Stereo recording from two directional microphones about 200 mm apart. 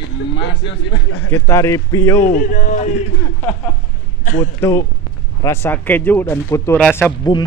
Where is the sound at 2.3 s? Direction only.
40° left (ahead or behind).